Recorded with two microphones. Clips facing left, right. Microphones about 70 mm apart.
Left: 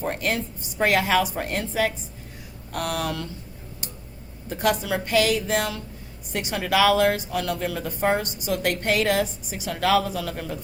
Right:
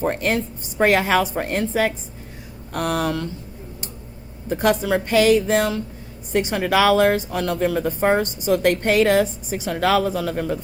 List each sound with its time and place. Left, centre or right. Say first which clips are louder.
0.0 s speech: right 5 dB; right
4.4 s speech: right 5 dB; right